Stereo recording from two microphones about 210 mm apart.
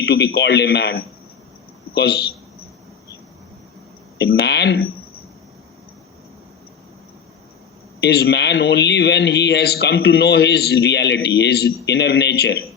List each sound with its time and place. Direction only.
0.0 s speech: 50° left (ahead or behind)
4.2 s speech: 50° left (ahead or behind)
8.0 s speech: 50° left (ahead or behind)